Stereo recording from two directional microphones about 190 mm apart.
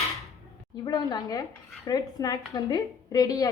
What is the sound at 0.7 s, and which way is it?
A woman's voice, 20° left (ahead or behind).